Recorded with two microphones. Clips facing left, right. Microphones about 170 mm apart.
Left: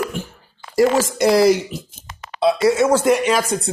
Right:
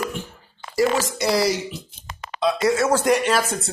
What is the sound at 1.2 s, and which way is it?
Speech, 50° left (ahead or behind).